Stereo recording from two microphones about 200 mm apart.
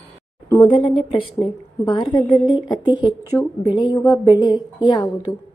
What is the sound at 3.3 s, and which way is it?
A woman's voice, 20° left (ahead or behind).